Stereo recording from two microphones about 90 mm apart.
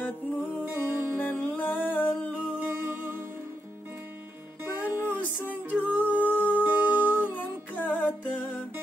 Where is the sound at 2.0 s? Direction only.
20° left (ahead or behind).